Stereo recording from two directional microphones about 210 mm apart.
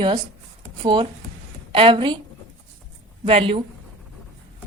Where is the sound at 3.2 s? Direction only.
25° right (ahead or behind).